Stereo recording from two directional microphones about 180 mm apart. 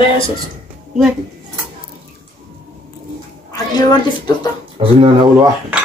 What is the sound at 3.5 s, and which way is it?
Speech, 20° left (ahead or behind).